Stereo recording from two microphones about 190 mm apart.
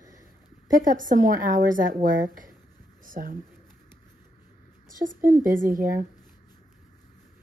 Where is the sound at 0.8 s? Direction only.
45° right (ahead or behind).